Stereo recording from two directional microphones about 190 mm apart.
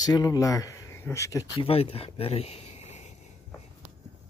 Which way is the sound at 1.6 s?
30° left (ahead or behind).